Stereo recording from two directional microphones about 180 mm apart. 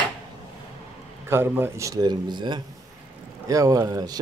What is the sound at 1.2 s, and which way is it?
Speech, 10° right (ahead or behind).